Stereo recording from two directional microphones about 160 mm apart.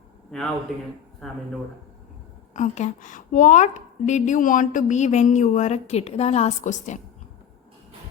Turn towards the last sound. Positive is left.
turn(degrees=50)  # may be behind; listen again after turning